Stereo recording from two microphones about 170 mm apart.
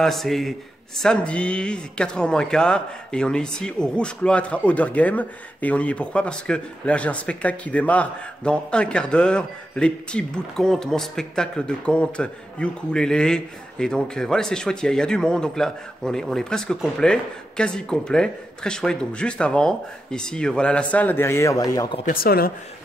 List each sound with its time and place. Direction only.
0.0 s speech: centre (ahead or behind); by 21.8 s 20° left (ahead or behind)
22.0 s speech: 60° left (ahead or behind)